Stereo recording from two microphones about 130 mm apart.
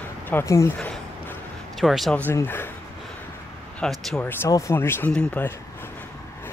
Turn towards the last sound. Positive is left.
turn(degrees=5)  # may be behind; listen again after turning